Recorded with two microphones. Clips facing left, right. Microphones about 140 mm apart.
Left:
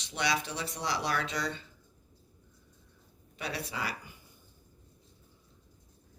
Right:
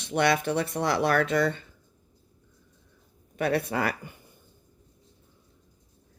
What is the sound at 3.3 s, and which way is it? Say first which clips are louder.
Speech: right 12 dB; 55° right (ahead or behind).